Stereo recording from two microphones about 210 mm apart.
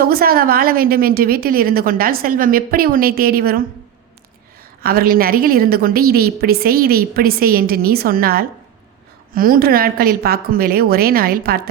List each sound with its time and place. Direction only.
0.0 s a woman's voice: 45° right (ahead or behind)
4.8 s a woman's voice: 45° right (ahead or behind)